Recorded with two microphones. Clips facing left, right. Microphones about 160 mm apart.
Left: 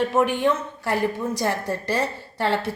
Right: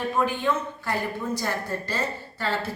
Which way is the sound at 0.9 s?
80° left.